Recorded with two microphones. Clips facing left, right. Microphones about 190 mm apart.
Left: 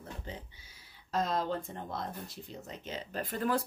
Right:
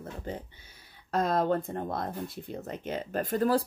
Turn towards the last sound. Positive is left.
turn(degrees=-40)  # may be behind; listen again after turning